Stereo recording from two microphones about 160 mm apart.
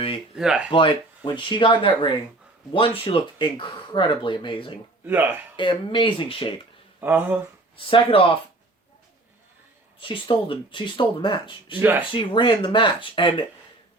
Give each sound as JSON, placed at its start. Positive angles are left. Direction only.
{"t": 0.3, "sound": "speech", "side_deg": -5}
{"t": 0.7, "sound": "speech", "side_deg": 30}
{"t": 5.0, "sound": "speech", "side_deg": -10}
{"t": 5.5, "sound": "speech", "side_deg": 30}
{"t": 7.0, "sound": "speech", "side_deg": -10}
{"t": 7.8, "sound": "speech", "side_deg": 35}
{"t": 10.0, "sound": "speech", "side_deg": 35}
{"t": 11.8, "sound": "speech", "side_deg": -10}
{"t": 12.1, "sound": "speech", "side_deg": 30}